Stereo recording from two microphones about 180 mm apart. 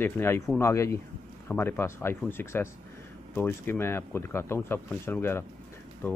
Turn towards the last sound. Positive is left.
turn(degrees=15)  # may be behind; listen again after turning